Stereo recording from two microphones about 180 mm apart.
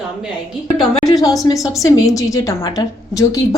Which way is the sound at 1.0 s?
20° left (ahead or behind).